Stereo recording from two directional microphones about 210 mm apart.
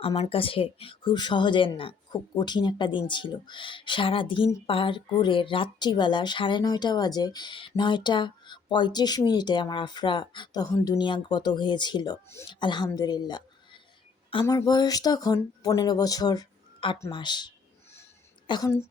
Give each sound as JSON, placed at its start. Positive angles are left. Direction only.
{"t": 0.0, "sound": "a woman's voice", "side_deg": 25}